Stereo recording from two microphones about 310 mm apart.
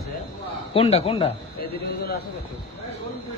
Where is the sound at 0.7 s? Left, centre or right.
Centre.